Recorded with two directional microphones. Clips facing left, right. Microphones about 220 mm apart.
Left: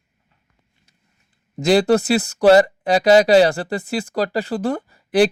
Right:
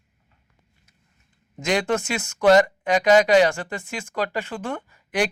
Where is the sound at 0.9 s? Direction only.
30° left (ahead or behind).